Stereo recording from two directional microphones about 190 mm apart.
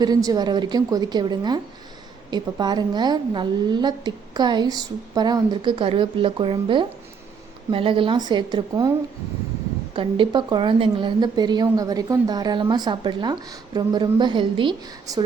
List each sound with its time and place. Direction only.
0.0 s a woman's voice: 20° right (ahead or behind)
9.9 s a woman's voice: 25° right (ahead or behind)